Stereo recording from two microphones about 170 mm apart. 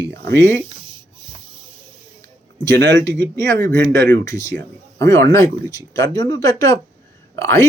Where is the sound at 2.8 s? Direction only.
90° right.